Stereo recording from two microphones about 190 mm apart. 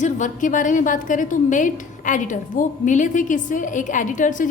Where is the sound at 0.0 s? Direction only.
40° left (ahead or behind).